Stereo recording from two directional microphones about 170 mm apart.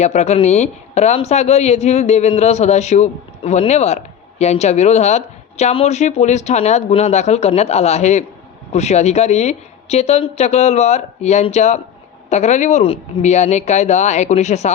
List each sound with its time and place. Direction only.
0.0 s speech: 40° left (ahead or behind)